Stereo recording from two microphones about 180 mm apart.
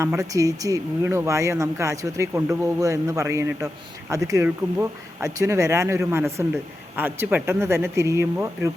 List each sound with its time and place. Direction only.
0.2 s speech: 20° right (ahead or behind)